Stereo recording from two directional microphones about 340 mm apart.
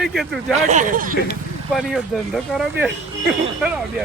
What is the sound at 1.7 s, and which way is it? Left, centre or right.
Speech, centre.